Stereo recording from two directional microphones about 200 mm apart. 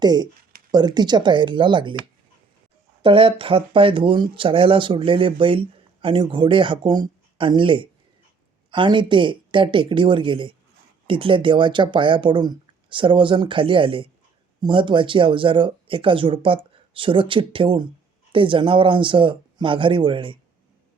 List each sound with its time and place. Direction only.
0.0 s speech: 20° right (ahead or behind)
3.0 s speech: 25° right (ahead or behind)